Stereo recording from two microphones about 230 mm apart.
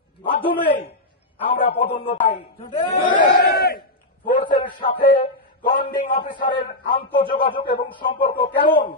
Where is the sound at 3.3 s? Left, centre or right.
Left.